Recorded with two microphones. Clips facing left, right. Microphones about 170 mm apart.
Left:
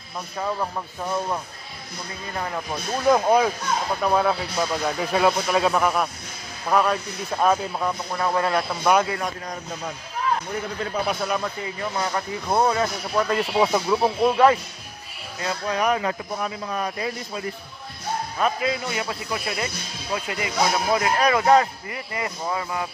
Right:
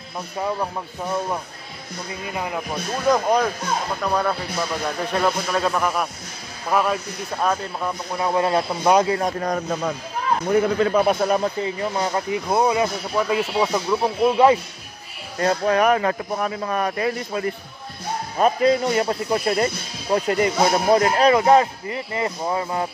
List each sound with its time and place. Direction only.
2.2 s speech: 10° right (ahead or behind)
3.1 s a man's voice: 5° left (ahead or behind)
8.1 s a man's voice: 15° right (ahead or behind)
9.4 s a man's voice: 80° right
11.1 s speech: 40° right (ahead or behind)
11.8 s a man's voice: 20° right (ahead or behind); by 14.3 s 5° left (ahead or behind)
14.3 s speech: 20° right (ahead or behind)
15.3 s speech: 55° right (ahead or behind)
18.4 s a man's voice: 40° right (ahead or behind)